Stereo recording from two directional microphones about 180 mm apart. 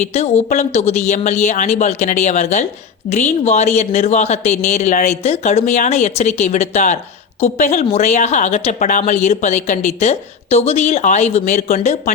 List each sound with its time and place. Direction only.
0.0 s speech: 35° left (ahead or behind)